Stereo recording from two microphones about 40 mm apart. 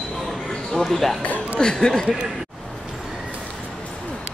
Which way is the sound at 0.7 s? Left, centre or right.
Centre.